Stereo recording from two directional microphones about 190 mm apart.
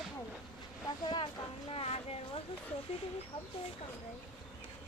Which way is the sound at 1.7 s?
30° left (ahead or behind).